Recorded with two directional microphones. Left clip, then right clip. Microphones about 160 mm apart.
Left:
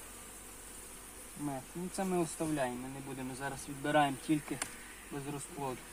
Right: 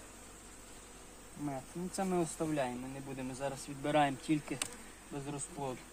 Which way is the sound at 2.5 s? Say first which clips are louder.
Even; 15° right (ahead or behind).